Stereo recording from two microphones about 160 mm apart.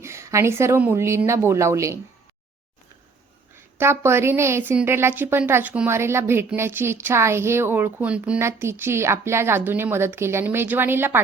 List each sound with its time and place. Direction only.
0.0 s a woman's voice: 15° right (ahead or behind)
3.8 s a woman's voice: 15° right (ahead or behind)